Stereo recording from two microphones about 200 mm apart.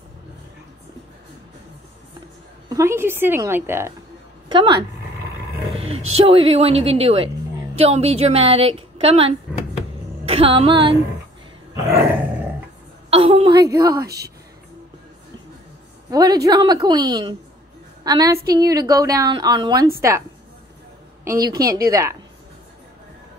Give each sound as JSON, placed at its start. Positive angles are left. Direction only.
{"t": 2.7, "sound": "a woman's voice", "side_deg": -15}
{"t": 4.5, "sound": "a woman's voice", "side_deg": -25}
{"t": 6.1, "sound": "a woman's voice", "side_deg": -30}
{"t": 10.2, "sound": "music", "side_deg": -30}
{"t": 11.9, "sound": "roar", "side_deg": -10}
{"t": 13.1, "sound": "a sound", "side_deg": -30}
{"t": 14.0, "sound": "speech", "side_deg": -55}
{"t": 16.1, "sound": "a woman's voice", "side_deg": -20}